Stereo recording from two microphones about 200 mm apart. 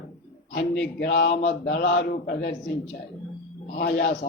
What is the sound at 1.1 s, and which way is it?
A man's voice, 55° left (ahead or behind).